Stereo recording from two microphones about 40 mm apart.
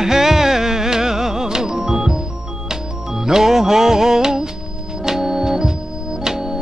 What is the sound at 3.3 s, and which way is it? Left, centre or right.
Music, centre.